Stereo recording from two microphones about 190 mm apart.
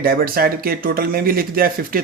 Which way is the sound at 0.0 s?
50° right (ahead or behind).